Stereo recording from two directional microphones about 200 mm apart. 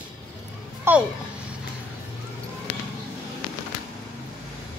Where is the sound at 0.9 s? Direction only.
10° right (ahead or behind).